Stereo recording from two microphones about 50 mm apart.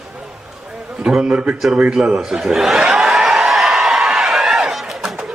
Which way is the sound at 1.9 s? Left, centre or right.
Centre.